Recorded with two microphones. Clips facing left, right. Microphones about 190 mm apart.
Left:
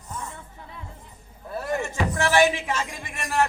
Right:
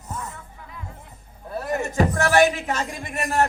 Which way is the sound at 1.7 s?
40° right (ahead or behind).